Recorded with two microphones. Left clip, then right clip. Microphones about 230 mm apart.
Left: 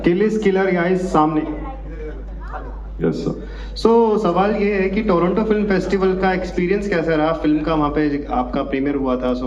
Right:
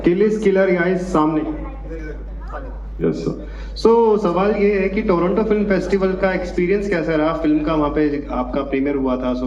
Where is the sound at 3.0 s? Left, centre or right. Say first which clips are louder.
Even; left.